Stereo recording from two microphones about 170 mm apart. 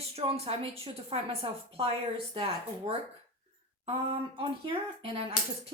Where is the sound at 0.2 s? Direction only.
35° right (ahead or behind).